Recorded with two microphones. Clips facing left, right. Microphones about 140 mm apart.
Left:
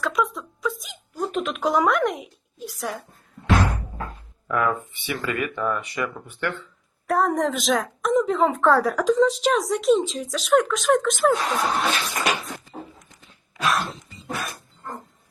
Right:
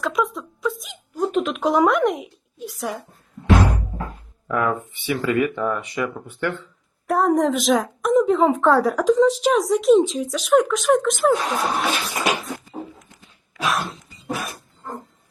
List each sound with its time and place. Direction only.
0.0 s a woman's voice: centre (ahead or behind)
4.4 s speech: 25° right (ahead or behind)
7.1 s a woman's voice: centre (ahead or behind)
12.5 s a sound: centre (ahead or behind)
14.3 s dog: centre (ahead or behind)